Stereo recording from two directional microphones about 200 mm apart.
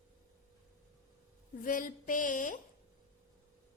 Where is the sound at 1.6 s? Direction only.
40° left (ahead or behind).